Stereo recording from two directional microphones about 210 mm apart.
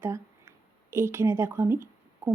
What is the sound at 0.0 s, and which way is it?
Speech, 10° right (ahead or behind).